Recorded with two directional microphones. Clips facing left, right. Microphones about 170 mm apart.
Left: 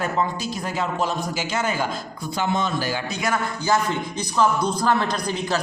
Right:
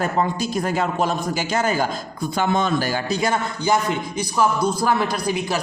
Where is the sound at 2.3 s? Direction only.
50° right (ahead or behind).